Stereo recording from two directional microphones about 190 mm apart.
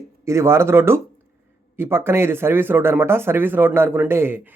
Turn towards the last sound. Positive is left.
turn(degrees=-10)  # may be behind; listen again after turning